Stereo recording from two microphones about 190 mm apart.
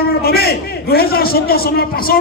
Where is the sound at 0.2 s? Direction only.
55° left (ahead or behind).